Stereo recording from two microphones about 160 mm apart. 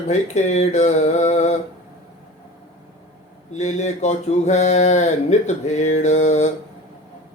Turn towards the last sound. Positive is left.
turn(degrees=45)  # may be behind; listen again after turning